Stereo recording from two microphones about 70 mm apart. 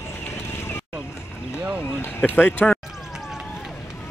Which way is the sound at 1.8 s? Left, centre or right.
Left.